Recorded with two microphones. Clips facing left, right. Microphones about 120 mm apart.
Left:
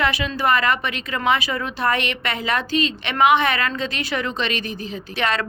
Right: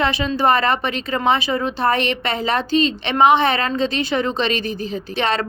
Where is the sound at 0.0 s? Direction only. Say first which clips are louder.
Right 3 dB; 25° right (ahead or behind).